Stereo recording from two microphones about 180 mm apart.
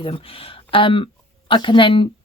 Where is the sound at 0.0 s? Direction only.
30° left (ahead or behind).